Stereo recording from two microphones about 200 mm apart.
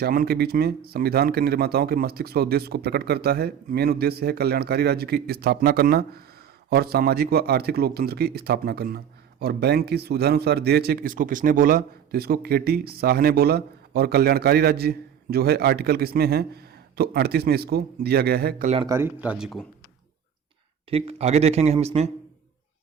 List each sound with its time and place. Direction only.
0.0 s a man's voice: 50° right (ahead or behind)
18.9 s speech: 10° right (ahead or behind)
20.9 s a man's voice: 30° right (ahead or behind)